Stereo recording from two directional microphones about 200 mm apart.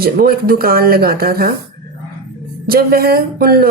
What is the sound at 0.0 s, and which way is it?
Speech, 50° right (ahead or behind).